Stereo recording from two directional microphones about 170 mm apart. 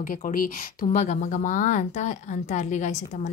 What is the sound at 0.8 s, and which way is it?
A woman's voice, 40° left (ahead or behind).